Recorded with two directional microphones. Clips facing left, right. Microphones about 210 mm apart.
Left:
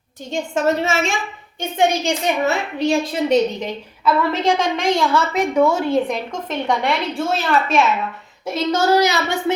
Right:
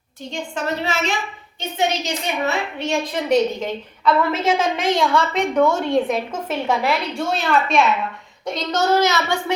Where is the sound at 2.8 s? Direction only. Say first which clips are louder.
Left 4 dB; 35° left (ahead or behind).